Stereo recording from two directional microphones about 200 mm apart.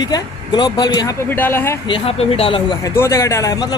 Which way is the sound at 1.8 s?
25° left (ahead or behind).